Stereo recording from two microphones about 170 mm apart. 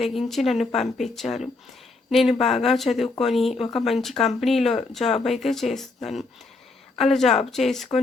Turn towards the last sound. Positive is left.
turn(degrees=0)  # may be behind; listen again after turning